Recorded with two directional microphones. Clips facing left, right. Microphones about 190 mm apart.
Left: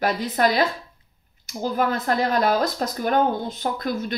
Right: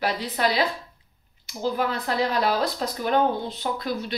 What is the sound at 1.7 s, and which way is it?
Speech, 45° left (ahead or behind).